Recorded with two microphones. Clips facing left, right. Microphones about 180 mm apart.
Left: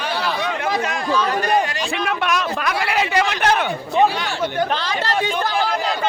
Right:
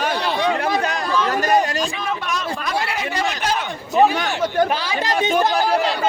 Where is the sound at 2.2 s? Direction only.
75° left (ahead or behind); by 3.6 s 60° left (ahead or behind).